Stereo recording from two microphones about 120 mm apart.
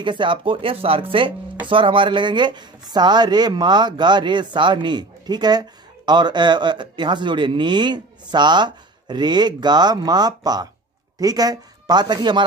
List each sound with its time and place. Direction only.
0.0 s speech: 40° right (ahead or behind)